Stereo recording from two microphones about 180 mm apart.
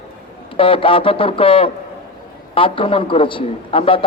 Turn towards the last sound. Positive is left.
turn(degrees=30)  # may be behind; listen again after turning